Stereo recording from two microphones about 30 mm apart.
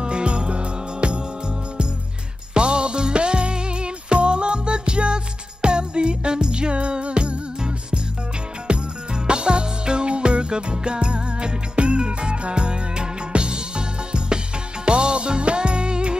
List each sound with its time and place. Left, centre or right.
0.0 s music: right
2.5 s music: right
8.6 s music: right